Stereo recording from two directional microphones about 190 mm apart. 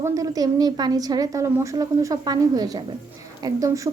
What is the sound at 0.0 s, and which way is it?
Speech, 20° right (ahead or behind).